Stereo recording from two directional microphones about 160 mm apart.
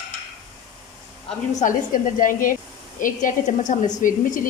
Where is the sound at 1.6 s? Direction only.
55° left (ahead or behind).